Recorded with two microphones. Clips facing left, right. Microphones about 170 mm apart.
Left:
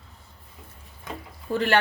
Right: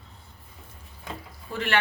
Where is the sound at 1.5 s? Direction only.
40° left (ahead or behind).